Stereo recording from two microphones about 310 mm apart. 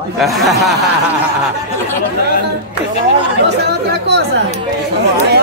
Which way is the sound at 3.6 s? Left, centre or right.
Right.